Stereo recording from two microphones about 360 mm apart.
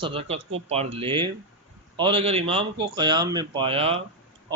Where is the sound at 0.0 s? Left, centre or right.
Centre.